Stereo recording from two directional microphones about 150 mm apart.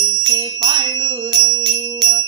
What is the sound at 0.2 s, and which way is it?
Music, 30° right (ahead or behind).